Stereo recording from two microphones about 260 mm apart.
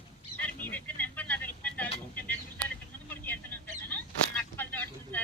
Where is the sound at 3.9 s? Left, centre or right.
Centre.